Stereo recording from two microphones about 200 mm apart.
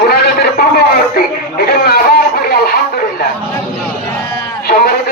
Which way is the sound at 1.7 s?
50° left (ahead or behind).